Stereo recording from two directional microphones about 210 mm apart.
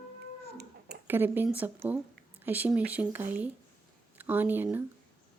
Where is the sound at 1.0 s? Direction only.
10° right (ahead or behind).